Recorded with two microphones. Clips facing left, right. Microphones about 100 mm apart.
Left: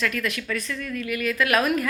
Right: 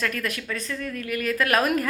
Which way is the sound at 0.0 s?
40° right (ahead or behind).